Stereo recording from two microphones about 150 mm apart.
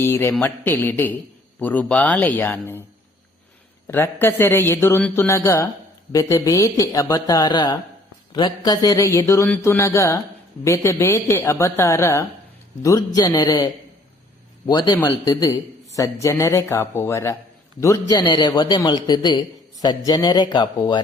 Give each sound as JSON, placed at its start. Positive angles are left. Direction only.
{"t": 0.0, "sound": "a man's voice", "side_deg": 15}
{"t": 3.8, "sound": "a man's voice", "side_deg": 15}
{"t": 14.7, "sound": "a man's voice", "side_deg": 25}